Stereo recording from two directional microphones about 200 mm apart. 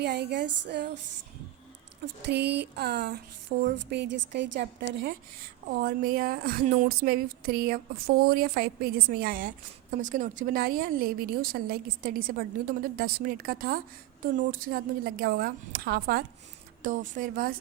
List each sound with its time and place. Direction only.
0.0 s a woman's voice: 55° right (ahead or behind)
2.2 s a woman's voice: 55° right (ahead or behind)